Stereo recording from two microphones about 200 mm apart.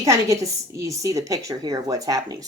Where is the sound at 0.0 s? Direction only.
15° right (ahead or behind).